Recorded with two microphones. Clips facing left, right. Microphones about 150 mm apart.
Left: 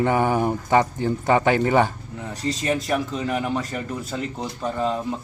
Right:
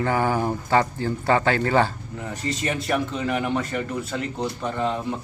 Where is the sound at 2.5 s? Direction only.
35° left (ahead or behind).